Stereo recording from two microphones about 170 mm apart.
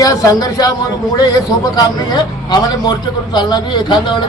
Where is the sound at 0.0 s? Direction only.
20° left (ahead or behind).